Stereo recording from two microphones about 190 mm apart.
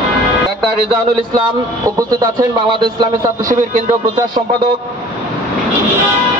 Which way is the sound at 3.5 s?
40° right (ahead or behind).